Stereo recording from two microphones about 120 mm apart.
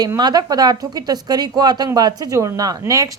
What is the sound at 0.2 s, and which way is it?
A woman's voice, 35° right (ahead or behind).